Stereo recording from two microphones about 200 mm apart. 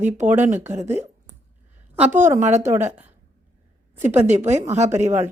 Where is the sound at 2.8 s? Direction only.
10° right (ahead or behind).